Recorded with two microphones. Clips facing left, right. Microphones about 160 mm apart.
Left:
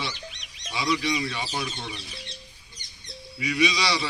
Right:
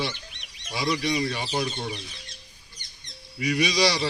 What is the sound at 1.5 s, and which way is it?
Speech, 40° right (ahead or behind).